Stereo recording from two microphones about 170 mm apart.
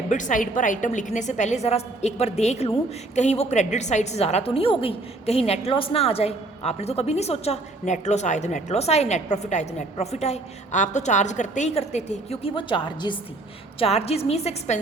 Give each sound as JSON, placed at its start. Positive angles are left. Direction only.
{"t": 0.1, "sound": "a woman's voice", "side_deg": 50}